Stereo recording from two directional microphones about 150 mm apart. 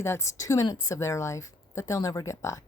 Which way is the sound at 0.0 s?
20° left (ahead or behind).